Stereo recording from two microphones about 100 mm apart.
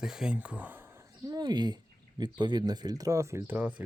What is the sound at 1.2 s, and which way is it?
Speech, 45° right (ahead or behind).